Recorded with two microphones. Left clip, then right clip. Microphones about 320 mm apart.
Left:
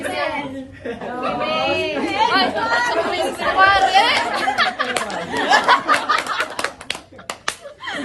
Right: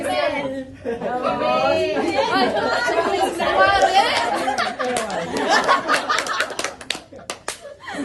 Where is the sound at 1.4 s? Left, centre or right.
Left.